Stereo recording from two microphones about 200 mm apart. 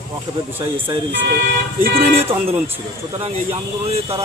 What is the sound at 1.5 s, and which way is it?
Speech, 50° right (ahead or behind).